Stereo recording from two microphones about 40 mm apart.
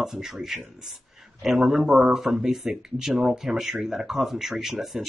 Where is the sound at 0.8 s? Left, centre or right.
Centre.